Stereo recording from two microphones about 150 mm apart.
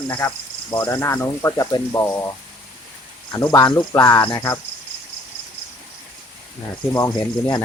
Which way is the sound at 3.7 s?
15° left (ahead or behind).